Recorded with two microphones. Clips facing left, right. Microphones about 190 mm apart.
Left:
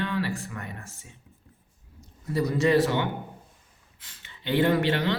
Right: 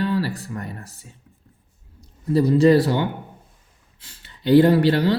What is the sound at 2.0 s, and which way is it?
A man's voice, 30° right (ahead or behind).